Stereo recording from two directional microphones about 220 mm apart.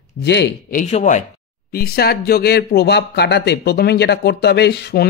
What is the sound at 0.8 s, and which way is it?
Speech, 30° left (ahead or behind).